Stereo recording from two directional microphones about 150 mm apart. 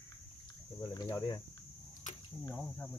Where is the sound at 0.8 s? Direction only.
25° left (ahead or behind).